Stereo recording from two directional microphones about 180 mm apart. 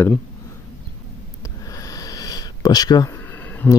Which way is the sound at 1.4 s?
20° left (ahead or behind).